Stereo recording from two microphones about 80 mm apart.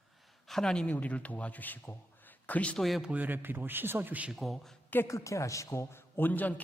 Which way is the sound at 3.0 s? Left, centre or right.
Centre.